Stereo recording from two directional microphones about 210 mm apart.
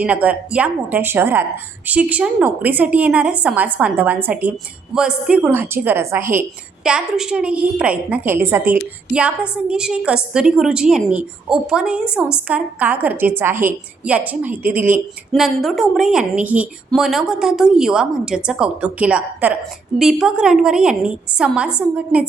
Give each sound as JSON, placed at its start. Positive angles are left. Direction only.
{"t": 0.0, "sound": "a woman's voice", "side_deg": -5}